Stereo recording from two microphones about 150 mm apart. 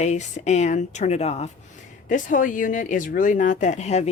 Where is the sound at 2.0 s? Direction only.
60° left (ahead or behind).